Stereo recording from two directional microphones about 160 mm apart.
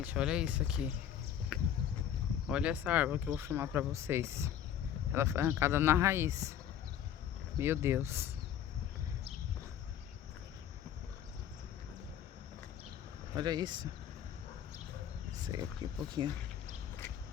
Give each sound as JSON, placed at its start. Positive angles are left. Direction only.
{"t": 0.0, "sound": "speech", "side_deg": -10}
{"t": 1.5, "sound": "a sound", "side_deg": 0}
{"t": 2.5, "sound": "speech", "side_deg": -5}
{"t": 7.6, "sound": "speech", "side_deg": -15}
{"t": 13.3, "sound": "speech", "side_deg": -25}
{"t": 15.4, "sound": "speech", "side_deg": -25}